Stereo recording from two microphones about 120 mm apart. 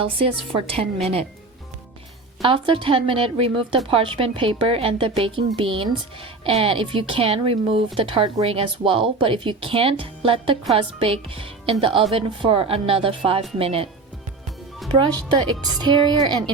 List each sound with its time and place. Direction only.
0.0 s a woman's voice: 50° right (ahead or behind)
2.4 s a woman's voice: 45° right (ahead or behind)
14.9 s a woman's voice: 40° right (ahead or behind)